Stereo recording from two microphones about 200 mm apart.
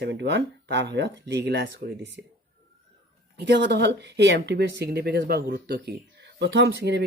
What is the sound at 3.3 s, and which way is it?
Speech, 60° right (ahead or behind).